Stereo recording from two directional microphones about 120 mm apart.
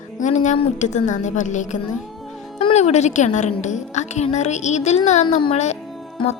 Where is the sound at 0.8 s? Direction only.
80° left.